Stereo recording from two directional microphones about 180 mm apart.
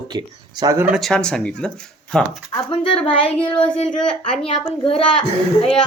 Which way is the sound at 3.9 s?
5° left (ahead or behind).